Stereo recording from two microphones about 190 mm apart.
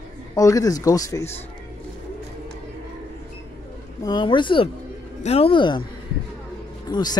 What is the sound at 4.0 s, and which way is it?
Speech, 25° left (ahead or behind).